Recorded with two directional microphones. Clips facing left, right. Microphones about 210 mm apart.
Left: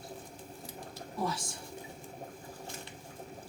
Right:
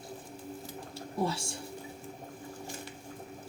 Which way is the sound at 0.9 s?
30° right (ahead or behind).